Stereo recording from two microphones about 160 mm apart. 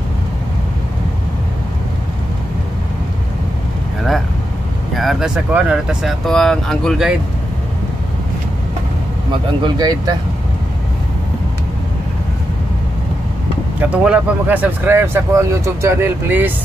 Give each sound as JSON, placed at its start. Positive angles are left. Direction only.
{"t": 4.9, "sound": "speech", "side_deg": 0}
{"t": 9.6, "sound": "speech", "side_deg": -25}
{"t": 13.7, "sound": "speech", "side_deg": -5}